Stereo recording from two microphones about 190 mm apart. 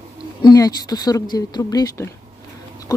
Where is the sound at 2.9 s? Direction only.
20° left (ahead or behind).